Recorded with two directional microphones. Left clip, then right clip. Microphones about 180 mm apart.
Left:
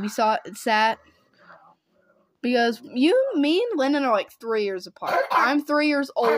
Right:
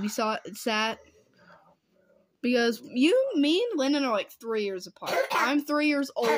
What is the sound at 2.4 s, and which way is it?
Speech, 35° right (ahead or behind).